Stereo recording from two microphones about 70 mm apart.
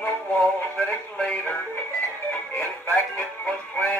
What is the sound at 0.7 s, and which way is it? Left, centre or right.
Radio, centre.